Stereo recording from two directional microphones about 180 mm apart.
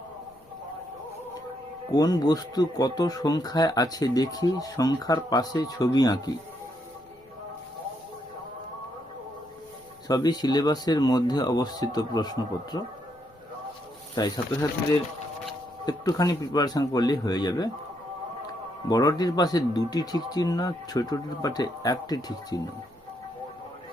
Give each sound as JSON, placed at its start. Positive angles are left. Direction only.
{"t": 1.9, "sound": "speech", "side_deg": 20}
{"t": 10.1, "sound": "speech", "side_deg": 20}
{"t": 14.2, "sound": "speech", "side_deg": 20}
{"t": 15.9, "sound": "speech", "side_deg": 20}
{"t": 18.9, "sound": "speech", "side_deg": 20}